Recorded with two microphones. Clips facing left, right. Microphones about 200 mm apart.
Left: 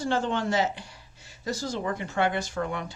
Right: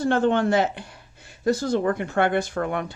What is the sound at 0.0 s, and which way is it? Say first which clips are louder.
Speech: right 7 dB; 55° right (ahead or behind).